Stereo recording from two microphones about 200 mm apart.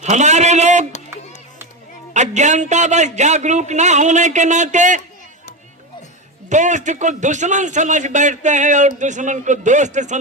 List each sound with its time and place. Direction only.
0.0 s speech: 35° right (ahead or behind)
2.1 s a man's voice: 35° right (ahead or behind)
6.5 s a man's voice: 35° right (ahead or behind)